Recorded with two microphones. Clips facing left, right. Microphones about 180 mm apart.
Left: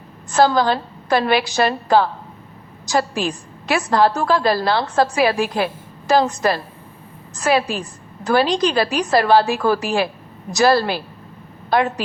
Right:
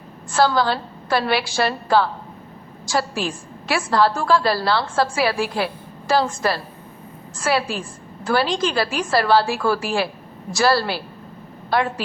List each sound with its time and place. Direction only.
0.3 s a woman's voice: 20° left (ahead or behind)